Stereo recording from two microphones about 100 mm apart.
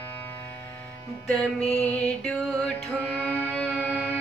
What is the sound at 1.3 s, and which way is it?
Music, 10° left (ahead or behind).